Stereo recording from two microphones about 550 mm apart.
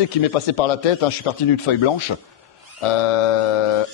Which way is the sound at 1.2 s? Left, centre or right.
Left.